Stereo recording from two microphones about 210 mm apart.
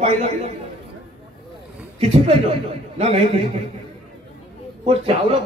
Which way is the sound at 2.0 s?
30° right (ahead or behind).